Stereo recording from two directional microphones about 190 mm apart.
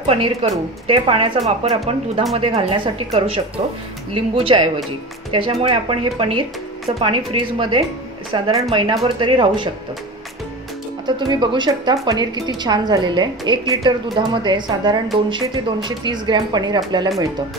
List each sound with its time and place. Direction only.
0.0 s a woman's voice: 30° right (ahead or behind)
11.1 s a woman's voice: 25° right (ahead or behind)